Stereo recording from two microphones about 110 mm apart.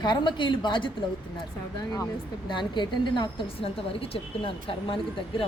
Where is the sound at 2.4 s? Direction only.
45° left (ahead or behind).